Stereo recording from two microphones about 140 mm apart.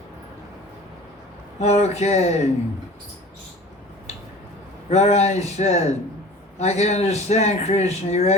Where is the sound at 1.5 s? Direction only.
50° left (ahead or behind).